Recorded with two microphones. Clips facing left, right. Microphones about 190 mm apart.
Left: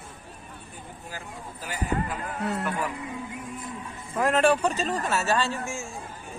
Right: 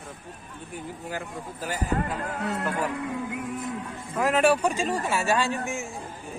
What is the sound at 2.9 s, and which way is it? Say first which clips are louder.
Music: right 5 dB; 60° right (ahead or behind).